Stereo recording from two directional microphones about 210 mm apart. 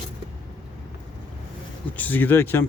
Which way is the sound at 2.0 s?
10° left (ahead or behind).